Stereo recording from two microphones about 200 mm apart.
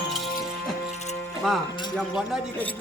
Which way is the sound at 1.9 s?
Centre (ahead or behind).